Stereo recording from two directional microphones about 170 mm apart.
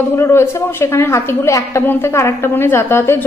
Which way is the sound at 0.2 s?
15° left (ahead or behind).